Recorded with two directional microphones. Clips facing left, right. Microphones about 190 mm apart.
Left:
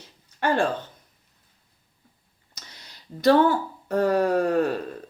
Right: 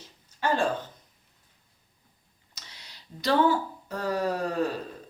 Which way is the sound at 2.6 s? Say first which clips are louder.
Left 3 dB; 50° left (ahead or behind).